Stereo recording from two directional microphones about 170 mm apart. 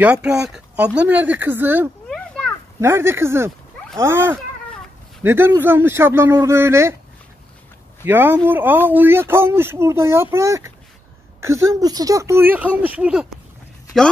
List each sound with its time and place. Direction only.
0.0 s speech: 5° right (ahead or behind)
2.0 s a sound: 5° left (ahead or behind)
2.8 s speech: 15° right (ahead or behind)
8.0 s speech: 10° right (ahead or behind)